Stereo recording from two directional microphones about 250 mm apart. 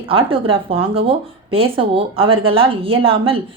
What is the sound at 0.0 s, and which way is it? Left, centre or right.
Speech, right.